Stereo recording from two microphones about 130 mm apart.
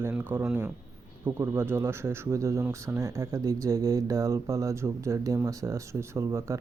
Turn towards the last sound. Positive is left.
turn(degrees=-20)  # may be behind; listen again after turning